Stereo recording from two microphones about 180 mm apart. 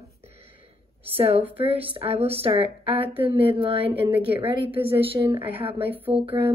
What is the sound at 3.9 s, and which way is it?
Speech, 10° right (ahead or behind).